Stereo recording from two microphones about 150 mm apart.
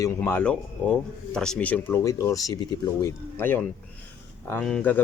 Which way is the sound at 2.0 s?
20° left (ahead or behind).